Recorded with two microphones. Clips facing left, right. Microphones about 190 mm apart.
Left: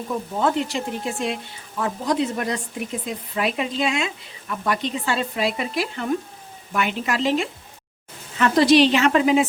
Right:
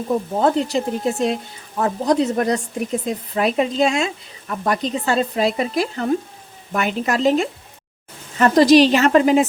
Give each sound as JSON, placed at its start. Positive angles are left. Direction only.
{"t": 0.1, "sound": "speech", "side_deg": -40}